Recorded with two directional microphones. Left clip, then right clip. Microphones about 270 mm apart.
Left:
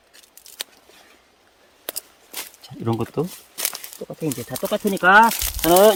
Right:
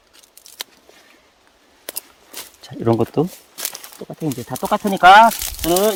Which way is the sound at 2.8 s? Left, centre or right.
Right.